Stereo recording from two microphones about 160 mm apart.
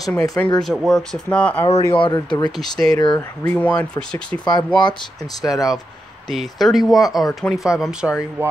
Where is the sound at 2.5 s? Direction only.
Centre (ahead or behind).